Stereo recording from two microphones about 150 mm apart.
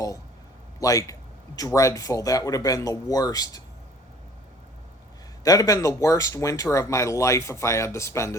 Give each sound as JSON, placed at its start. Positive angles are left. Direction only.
{"t": 0.8, "sound": "speech", "side_deg": 20}
{"t": 5.4, "sound": "speech", "side_deg": 25}